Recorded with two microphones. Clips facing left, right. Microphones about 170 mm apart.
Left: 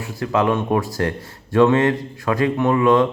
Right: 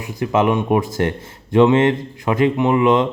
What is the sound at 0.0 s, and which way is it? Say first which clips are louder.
A man's voice: right 2 dB; 20° right (ahead or behind).